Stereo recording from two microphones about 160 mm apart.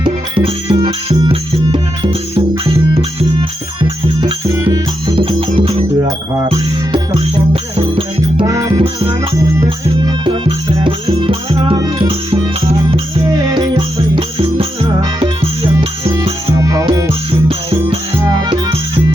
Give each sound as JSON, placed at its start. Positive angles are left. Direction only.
{"t": 0.0, "sound": "music", "side_deg": -30}
{"t": 4.4, "sound": "music", "side_deg": -20}
{"t": 5.1, "sound": "music", "side_deg": -35}
{"t": 6.1, "sound": "music", "side_deg": -20}
{"t": 8.4, "sound": "music", "side_deg": -20}
{"t": 8.8, "sound": "music", "side_deg": -35}
{"t": 10.0, "sound": "music", "side_deg": -25}
{"t": 13.2, "sound": "music", "side_deg": -25}
{"t": 16.5, "sound": "music", "side_deg": -20}
{"t": 17.1, "sound": "music", "side_deg": -35}